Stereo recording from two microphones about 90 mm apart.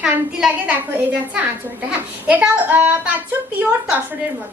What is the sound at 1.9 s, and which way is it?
A woman's voice, 15° right (ahead or behind).